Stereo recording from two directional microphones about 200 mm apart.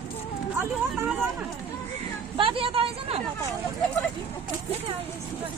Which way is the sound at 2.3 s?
25° right (ahead or behind).